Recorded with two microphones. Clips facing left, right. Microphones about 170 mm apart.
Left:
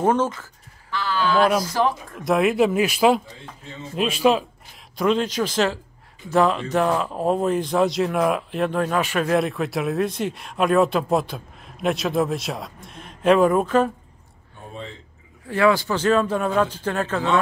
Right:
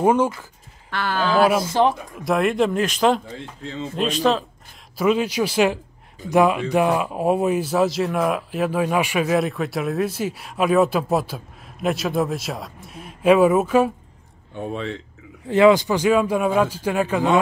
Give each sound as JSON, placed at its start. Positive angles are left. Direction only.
{"t": 0.0, "sound": "speech", "side_deg": -10}
{"t": 0.8, "sound": "speech", "side_deg": -60}
{"t": 1.6, "sound": "speech", "side_deg": -25}
{"t": 2.1, "sound": "speech", "side_deg": 0}
{"t": 3.6, "sound": "speech", "side_deg": -75}
{"t": 3.9, "sound": "a man's voice", "side_deg": 5}
{"t": 4.9, "sound": "speech", "side_deg": -5}
{"t": 14.5, "sound": "speech", "side_deg": -75}
{"t": 15.4, "sound": "speech", "side_deg": -20}